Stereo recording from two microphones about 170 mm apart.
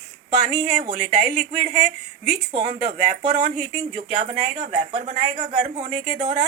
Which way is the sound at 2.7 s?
50° right (ahead or behind).